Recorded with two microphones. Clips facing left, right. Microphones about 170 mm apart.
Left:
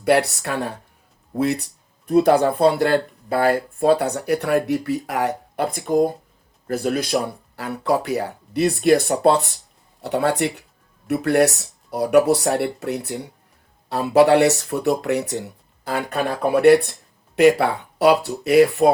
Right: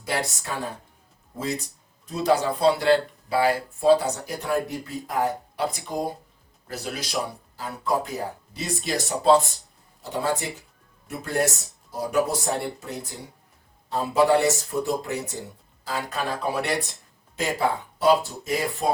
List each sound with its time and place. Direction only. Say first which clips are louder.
0.0 s speech: left 11 dB; 65° left (ahead or behind)